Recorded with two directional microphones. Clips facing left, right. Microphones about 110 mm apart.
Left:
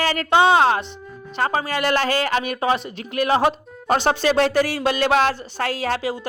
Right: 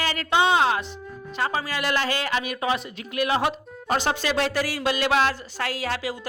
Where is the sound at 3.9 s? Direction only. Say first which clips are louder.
Left 5 dB; 50° left (ahead or behind).